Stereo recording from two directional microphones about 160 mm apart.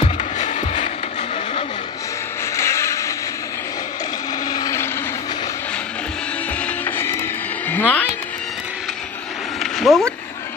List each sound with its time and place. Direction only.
0.0 s music: 50° left (ahead or behind)
2.5 s music: 15° left (ahead or behind)
4.5 s vehicle: 20° left (ahead or behind)
6.6 s music: 15° left (ahead or behind)
7.6 s a sound: 10° left (ahead or behind)
9.6 s a sound: centre (ahead or behind)